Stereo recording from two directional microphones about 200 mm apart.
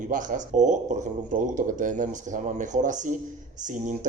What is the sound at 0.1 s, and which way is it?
Speech, 40° right (ahead or behind).